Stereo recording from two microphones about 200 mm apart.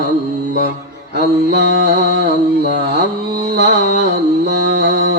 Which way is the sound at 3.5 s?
55° right (ahead or behind).